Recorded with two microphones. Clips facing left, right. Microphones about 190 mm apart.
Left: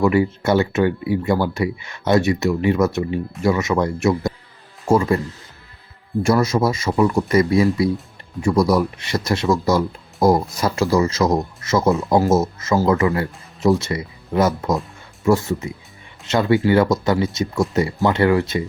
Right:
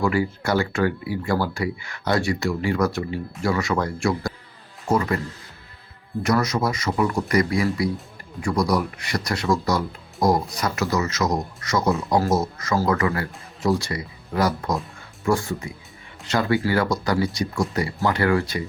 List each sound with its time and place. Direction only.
0.0 s speech: 25° left (ahead or behind)
6.2 s speech: 25° left (ahead or behind)
11.9 s speech: centre (ahead or behind)
12.1 s speech: 25° left (ahead or behind)